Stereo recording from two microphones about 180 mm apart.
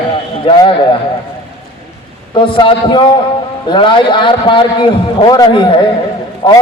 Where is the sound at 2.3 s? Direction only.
25° left (ahead or behind).